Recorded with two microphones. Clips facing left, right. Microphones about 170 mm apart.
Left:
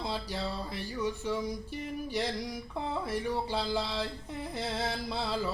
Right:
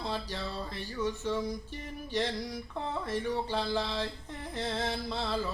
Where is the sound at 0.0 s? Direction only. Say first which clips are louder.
Left 1 dB; 10° left (ahead or behind).